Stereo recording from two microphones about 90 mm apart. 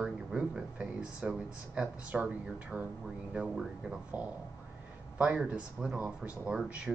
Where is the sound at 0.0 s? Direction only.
10° right (ahead or behind).